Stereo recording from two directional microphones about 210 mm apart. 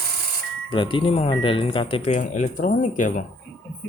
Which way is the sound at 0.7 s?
25° left (ahead or behind).